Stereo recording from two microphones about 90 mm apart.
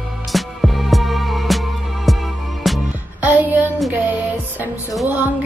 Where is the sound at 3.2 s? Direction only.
20° right (ahead or behind).